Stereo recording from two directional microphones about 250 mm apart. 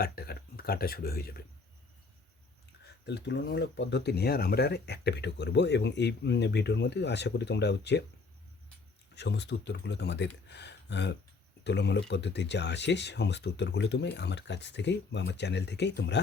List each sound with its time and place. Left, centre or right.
0.0 s speech: left
3.1 s speech: left
9.1 s speech: left